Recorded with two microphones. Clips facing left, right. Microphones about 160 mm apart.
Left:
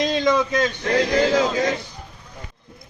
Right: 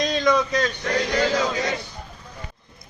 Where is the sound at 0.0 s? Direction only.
25° left (ahead or behind).